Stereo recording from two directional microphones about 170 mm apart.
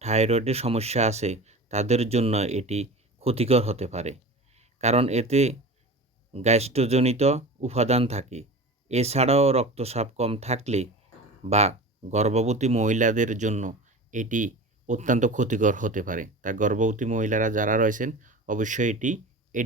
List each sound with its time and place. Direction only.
0.0 s speech: 40° right (ahead or behind)